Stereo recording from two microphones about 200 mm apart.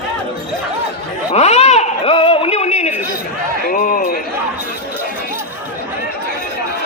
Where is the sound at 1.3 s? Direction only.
35° left (ahead or behind).